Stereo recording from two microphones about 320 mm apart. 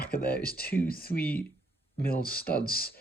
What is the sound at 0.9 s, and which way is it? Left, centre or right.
Speech, left.